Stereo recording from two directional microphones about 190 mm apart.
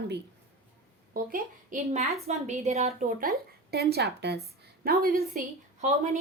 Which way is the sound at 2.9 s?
50° right (ahead or behind).